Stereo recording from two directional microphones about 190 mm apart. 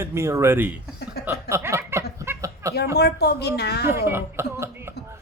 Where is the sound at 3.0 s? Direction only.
60° left (ahead or behind).